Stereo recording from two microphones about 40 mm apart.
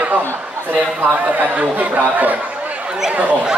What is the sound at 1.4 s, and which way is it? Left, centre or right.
Speech, right.